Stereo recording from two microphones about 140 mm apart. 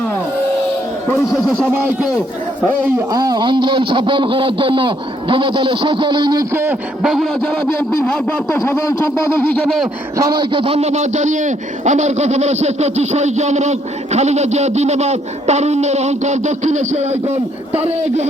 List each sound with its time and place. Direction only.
1.3 s speech: centre (ahead or behind)
1.7 s a man's voice: 15° right (ahead or behind)
3.1 s a man's voice: 25° right (ahead or behind)
6.5 s a man's voice: 15° right (ahead or behind)
7.0 s speech: centre (ahead or behind)
8.6 s a sound: 20° left (ahead or behind)
9.5 s speech: centre (ahead or behind)
10.2 s a man's voice: 30° right (ahead or behind); by 18.3 s 50° right (ahead or behind)